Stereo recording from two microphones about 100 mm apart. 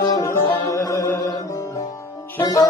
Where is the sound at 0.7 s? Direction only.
30° left (ahead or behind).